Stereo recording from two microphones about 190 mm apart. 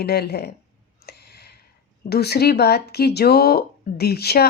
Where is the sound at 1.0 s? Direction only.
55° left (ahead or behind).